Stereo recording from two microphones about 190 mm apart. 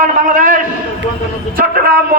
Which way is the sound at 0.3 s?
45° right (ahead or behind).